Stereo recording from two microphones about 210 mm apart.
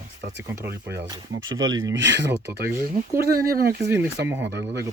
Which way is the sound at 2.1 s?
55° right (ahead or behind).